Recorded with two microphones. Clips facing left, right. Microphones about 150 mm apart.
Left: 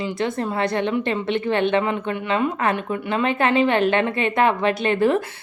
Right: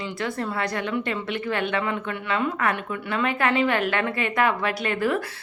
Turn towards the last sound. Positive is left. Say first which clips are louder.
# left 6 dB
turn(degrees=25)  # may be behind; listen again after turning